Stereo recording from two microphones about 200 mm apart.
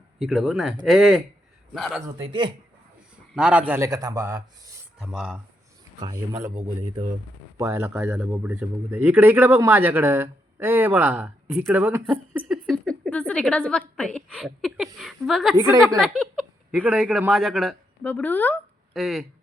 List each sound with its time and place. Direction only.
0.2 s a woman's voice: centre (ahead or behind)
2.2 s speech: 25° right (ahead or behind)
3.3 s speech: 5° right (ahead or behind)
4.9 s a woman's voice: 5° right (ahead or behind)
6.1 s speech: 15° right (ahead or behind)
7.5 s a woman's voice: 15° right (ahead or behind)
15.5 s speech: 15° right (ahead or behind)
16.0 s speech: centre (ahead or behind)